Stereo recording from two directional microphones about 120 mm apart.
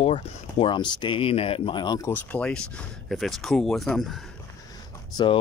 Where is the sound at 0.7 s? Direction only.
40° left (ahead or behind).